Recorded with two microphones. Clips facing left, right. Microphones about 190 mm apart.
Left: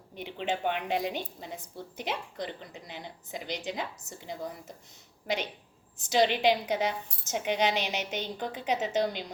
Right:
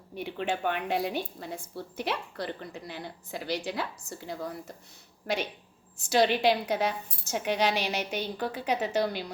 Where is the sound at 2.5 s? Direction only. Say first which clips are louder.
Right 4 dB; 60° right (ahead or behind).